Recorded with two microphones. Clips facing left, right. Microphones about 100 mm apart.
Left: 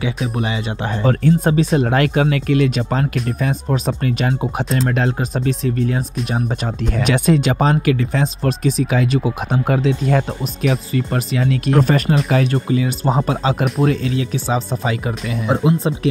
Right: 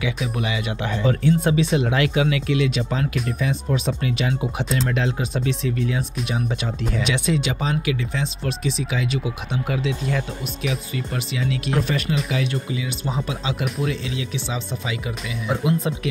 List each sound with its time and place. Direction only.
0.0 s speech: 35° left (ahead or behind)
15.4 s speech: 35° left (ahead or behind)